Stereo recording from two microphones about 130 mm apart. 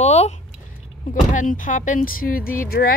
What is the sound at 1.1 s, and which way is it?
Speech, 85° left.